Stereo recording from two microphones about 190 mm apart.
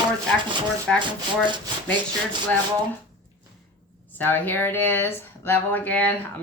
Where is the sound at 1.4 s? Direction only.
25° right (ahead or behind).